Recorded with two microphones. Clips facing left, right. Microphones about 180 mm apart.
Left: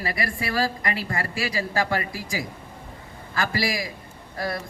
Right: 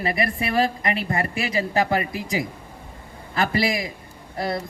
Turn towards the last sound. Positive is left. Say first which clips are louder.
# right 3 dB
turn(degrees=-25)  # may be behind; listen again after turning